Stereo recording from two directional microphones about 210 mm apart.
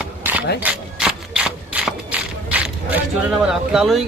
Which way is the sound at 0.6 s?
5° right (ahead or behind).